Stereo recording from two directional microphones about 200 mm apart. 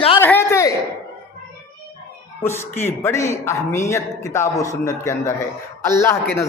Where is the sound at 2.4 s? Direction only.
10° left (ahead or behind).